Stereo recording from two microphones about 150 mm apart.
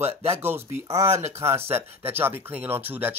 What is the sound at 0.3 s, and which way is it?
A man's voice, 15° right (ahead or behind).